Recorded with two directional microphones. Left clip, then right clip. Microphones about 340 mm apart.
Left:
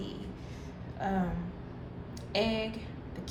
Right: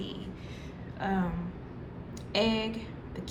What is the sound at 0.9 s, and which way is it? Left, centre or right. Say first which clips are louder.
Speech: right 1 dB; centre.